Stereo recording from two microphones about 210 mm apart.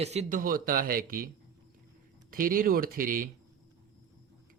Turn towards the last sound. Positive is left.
turn(degrees=-40)  # may be behind; listen again after turning